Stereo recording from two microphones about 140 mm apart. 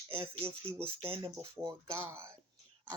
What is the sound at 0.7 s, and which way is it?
Speech, 15° right (ahead or behind).